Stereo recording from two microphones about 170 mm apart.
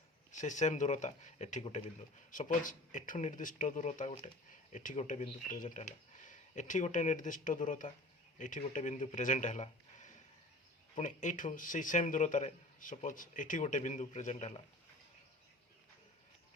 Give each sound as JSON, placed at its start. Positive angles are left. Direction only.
{"t": 0.3, "sound": "a man's voice", "side_deg": 45}